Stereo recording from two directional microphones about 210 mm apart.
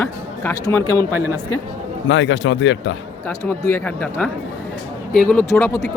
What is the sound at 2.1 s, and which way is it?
Speech, 60° left (ahead or behind).